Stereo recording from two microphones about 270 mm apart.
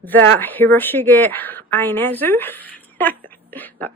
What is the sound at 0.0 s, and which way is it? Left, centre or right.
Speech, centre.